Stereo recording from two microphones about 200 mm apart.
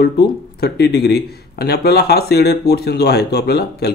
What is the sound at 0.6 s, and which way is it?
Speech, 55° left (ahead or behind).